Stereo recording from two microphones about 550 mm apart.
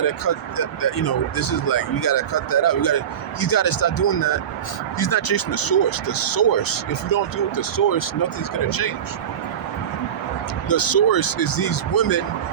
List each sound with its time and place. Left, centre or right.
0.3 s speech: left
10.7 s speech: left